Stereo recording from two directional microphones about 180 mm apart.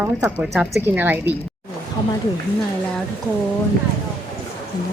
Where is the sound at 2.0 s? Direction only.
25° left (ahead or behind).